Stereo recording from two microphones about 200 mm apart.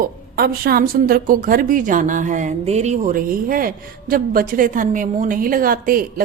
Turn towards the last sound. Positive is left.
turn(degrees=-45)  # may be behind; listen again after turning